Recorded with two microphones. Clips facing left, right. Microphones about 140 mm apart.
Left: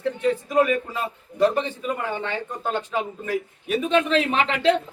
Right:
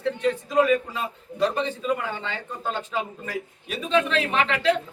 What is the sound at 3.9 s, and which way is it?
Speech, 25° left (ahead or behind).